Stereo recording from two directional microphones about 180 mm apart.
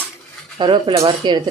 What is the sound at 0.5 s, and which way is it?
Stir, 25° right (ahead or behind).